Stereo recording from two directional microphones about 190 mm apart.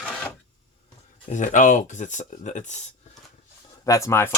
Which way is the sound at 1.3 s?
40° left (ahead or behind).